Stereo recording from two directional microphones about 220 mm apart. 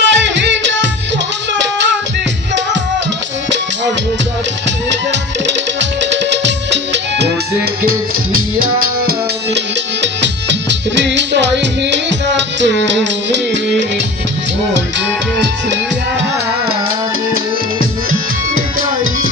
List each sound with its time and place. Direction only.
0.0 s music: 55° right (ahead or behind)
5.5 s music: 55° right (ahead or behind)
9.6 s music: 55° right (ahead or behind)